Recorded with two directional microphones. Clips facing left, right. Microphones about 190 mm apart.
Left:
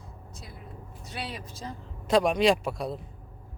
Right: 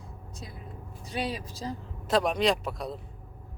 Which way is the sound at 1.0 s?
15° right (ahead or behind).